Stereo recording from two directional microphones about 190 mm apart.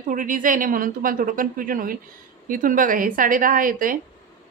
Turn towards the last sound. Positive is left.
turn(degrees=-45)  # may be behind; listen again after turning